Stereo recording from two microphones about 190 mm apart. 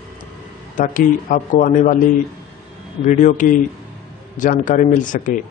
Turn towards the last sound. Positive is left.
turn(degrees=45)  # may be behind; listen again after turning